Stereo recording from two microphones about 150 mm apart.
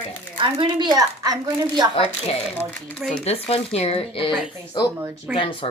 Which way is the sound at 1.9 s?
40° left (ahead or behind).